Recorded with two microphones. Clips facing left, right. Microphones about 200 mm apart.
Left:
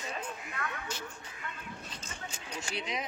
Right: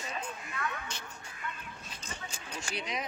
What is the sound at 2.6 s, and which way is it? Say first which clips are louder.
Speech: even; 25° left (ahead or behind).